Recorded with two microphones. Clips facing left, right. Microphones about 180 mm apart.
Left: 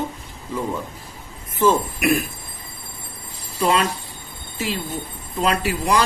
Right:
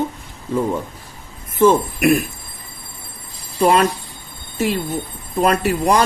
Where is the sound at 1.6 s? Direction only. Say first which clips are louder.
Right 5 dB; 55° right (ahead or behind).